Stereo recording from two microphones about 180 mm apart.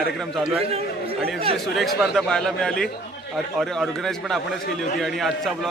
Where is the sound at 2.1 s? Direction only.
Centre (ahead or behind).